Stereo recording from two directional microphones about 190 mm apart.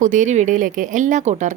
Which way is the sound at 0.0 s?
40° right (ahead or behind).